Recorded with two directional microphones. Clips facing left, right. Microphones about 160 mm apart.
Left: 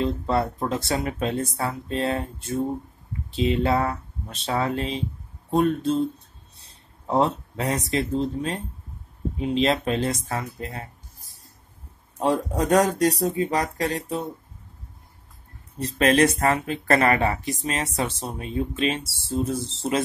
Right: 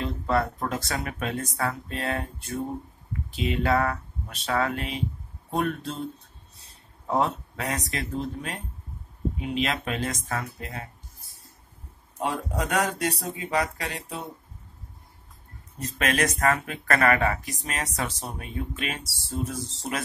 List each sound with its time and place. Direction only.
0.0 s speech: 25° left (ahead or behind)
7.1 s speech: 30° left (ahead or behind)
12.2 s speech: 40° left (ahead or behind)
16.0 s speech: 30° left (ahead or behind)